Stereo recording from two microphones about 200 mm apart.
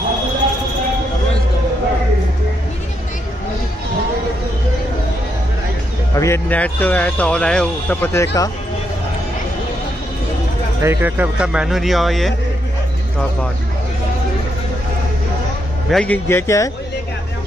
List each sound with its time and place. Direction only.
6.1 s speech: 15° left (ahead or behind)
10.8 s speech: 10° right (ahead or behind)
15.9 s speech: 5° left (ahead or behind)